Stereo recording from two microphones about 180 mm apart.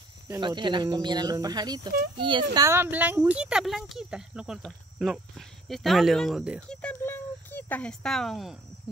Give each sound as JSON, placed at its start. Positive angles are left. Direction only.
{"t": 0.4, "sound": "speech", "side_deg": -25}
{"t": 2.5, "sound": "speech", "side_deg": -15}
{"t": 6.7, "sound": "a sound", "side_deg": 5}